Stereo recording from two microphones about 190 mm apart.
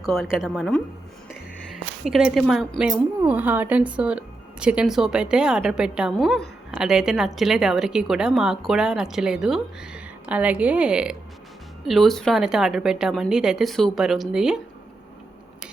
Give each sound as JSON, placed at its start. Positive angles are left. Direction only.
{"t": 0.0, "sound": "a woman's voice", "side_deg": 0}